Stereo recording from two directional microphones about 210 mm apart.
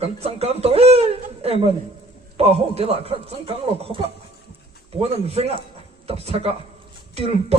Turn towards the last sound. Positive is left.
turn(degrees=-30)  # may be behind; listen again after turning